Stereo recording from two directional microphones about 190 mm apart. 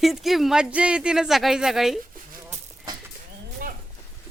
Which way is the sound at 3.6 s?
50° right (ahead or behind).